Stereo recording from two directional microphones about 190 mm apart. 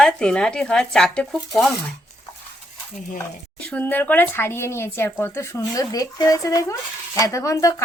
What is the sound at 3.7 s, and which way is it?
Speech, 10° left (ahead or behind).